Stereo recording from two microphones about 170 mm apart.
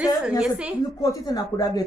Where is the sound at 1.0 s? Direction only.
20° left (ahead or behind).